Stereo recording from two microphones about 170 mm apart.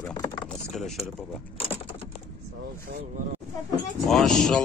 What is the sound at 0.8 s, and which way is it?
Speech, centre (ahead or behind).